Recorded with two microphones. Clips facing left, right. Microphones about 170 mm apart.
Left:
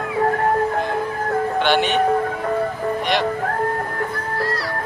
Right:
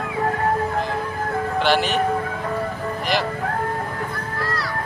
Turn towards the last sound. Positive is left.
turn(degrees=0)  # may be behind; listen again after turning